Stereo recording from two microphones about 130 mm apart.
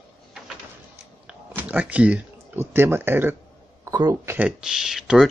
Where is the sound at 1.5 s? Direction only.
15° right (ahead or behind).